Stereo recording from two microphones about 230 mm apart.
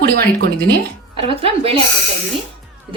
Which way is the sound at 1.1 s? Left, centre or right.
Right.